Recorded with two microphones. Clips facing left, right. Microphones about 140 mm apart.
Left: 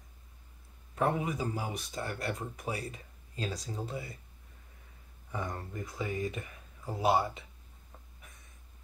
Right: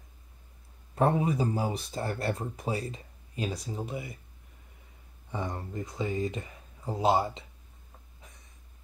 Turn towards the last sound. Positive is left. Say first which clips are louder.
# right 2 dB
turn(degrees=-25)  # may be behind; listen again after turning